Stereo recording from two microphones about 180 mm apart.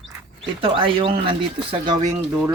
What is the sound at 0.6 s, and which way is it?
Speech, 30° right (ahead or behind).